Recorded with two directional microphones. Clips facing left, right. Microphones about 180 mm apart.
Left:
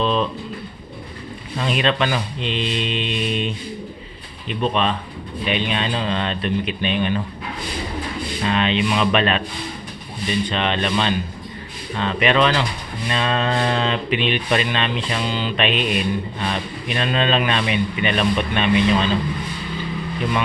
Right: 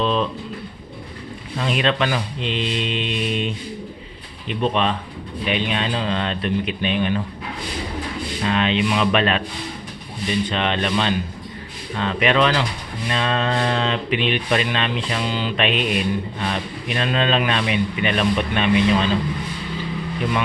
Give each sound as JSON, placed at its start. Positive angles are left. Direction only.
{"t": 0.0, "sound": "speech", "side_deg": 0}
{"t": 1.5, "sound": "speech", "side_deg": 0}
{"t": 4.4, "sound": "speech", "side_deg": -15}
{"t": 8.4, "sound": "speech", "side_deg": -5}
{"t": 10.5, "sound": "speech", "side_deg": -5}